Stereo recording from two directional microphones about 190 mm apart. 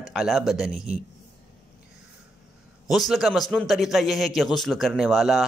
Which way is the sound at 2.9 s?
Centre (ahead or behind).